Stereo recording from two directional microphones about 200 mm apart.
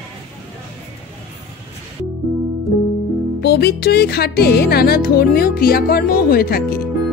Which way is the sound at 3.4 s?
55° left (ahead or behind).